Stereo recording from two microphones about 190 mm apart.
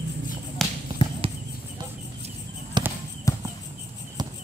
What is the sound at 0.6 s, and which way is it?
Basketball bounce, centre (ahead or behind).